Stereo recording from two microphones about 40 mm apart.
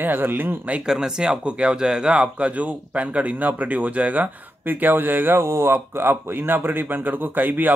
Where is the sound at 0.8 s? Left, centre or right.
Centre.